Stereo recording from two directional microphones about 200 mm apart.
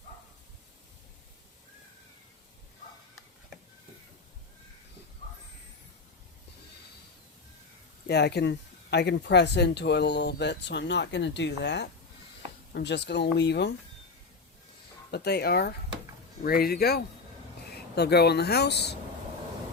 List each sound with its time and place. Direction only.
8.0 s speech: 55° left (ahead or behind)
15.1 s speech: 55° left (ahead or behind)